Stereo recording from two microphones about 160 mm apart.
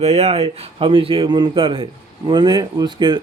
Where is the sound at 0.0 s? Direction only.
40° right (ahead or behind).